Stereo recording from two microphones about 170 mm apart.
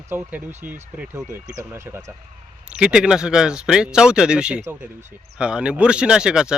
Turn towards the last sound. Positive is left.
turn(degrees=-5)  # may be behind; listen again after turning